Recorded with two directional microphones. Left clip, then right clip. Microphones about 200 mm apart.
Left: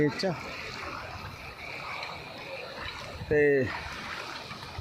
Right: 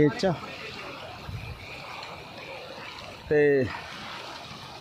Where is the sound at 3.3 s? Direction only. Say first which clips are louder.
Right 2 dB; 10° right (ahead or behind).